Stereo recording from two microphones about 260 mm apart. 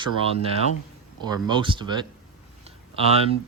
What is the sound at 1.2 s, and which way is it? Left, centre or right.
Speech, centre.